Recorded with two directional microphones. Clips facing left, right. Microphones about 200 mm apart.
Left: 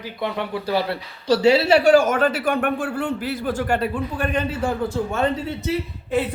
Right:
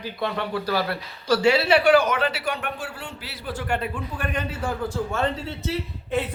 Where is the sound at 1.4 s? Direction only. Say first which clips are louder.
Left 4 dB; 40° left (ahead or behind).